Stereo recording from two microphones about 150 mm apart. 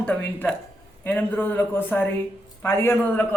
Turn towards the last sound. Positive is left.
turn(degrees=15)  # may be behind; listen again after turning